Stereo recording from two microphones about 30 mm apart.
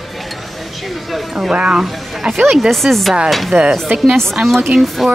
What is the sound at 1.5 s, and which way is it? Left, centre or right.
Speech, right.